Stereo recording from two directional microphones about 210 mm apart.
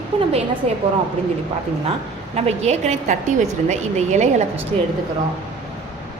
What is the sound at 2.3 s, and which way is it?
A woman's voice, 30° right (ahead or behind).